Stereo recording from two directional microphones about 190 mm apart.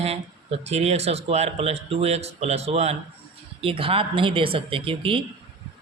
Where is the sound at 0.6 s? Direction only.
35° right (ahead or behind).